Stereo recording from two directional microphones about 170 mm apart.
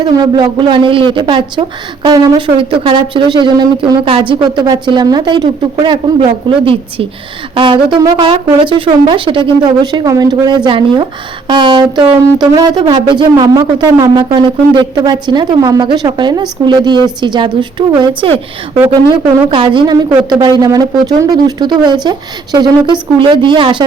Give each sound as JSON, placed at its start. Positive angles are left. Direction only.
{"t": 0.0, "sound": "speech", "side_deg": -25}
{"t": 7.5, "sound": "speech", "side_deg": -30}
{"t": 19.5, "sound": "speech", "side_deg": -25}